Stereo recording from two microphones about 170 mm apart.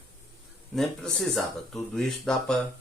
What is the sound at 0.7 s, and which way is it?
Speech, centre (ahead or behind).